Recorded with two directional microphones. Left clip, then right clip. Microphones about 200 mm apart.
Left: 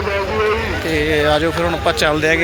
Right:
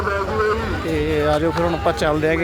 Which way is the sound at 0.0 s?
55° right (ahead or behind).